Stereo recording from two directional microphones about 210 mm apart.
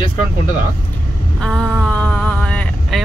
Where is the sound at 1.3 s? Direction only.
5° left (ahead or behind).